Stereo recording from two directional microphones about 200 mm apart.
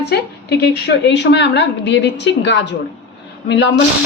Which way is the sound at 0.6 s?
60° left (ahead or behind).